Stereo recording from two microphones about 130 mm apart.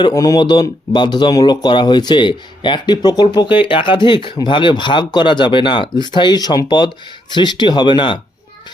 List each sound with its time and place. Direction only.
0.0 s speech: 30° left (ahead or behind)